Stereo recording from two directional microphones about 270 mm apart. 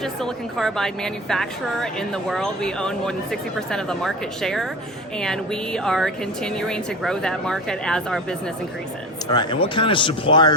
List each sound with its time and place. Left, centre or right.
0.0 s a woman's voice: centre
9.3 s speech: centre